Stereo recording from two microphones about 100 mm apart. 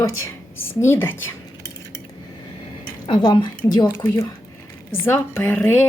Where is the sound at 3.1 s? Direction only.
50° left (ahead or behind).